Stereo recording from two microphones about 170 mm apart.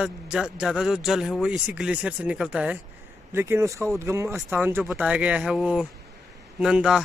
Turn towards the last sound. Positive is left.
turn(degrees=-5)  # may be behind; listen again after turning